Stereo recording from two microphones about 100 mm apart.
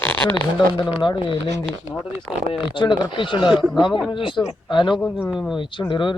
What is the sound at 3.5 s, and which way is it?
Speech, centre (ahead or behind).